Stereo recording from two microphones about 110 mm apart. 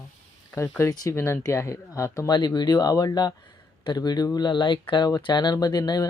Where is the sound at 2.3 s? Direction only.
40° left (ahead or behind).